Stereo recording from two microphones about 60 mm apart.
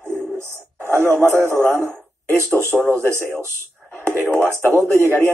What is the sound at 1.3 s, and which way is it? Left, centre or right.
Speech, right.